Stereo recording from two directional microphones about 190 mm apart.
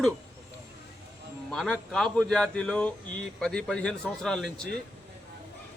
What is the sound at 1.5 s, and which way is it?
Speech, 5° left (ahead or behind).